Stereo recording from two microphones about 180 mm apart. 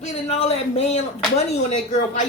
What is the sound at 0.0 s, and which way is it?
A man's voice, 35° left (ahead or behind).